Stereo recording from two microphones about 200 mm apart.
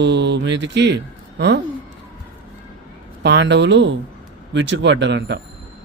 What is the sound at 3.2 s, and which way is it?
Speech, 60° right (ahead or behind).